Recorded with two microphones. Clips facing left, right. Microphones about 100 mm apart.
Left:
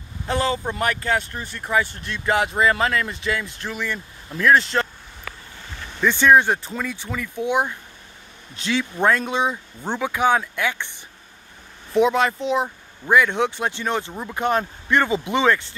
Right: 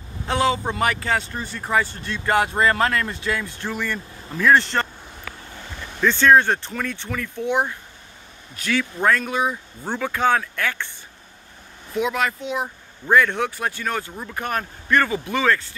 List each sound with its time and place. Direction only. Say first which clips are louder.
0.3 s speech: right 2 dB; centre (ahead or behind)
6.0 s speech: even; 15° left (ahead or behind)
11.9 s speech: left 5 dB; 30° left (ahead or behind)
12.6 s speech: even; 10° left (ahead or behind)